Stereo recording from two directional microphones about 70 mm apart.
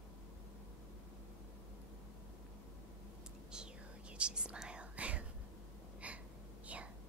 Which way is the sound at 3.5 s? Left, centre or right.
Centre.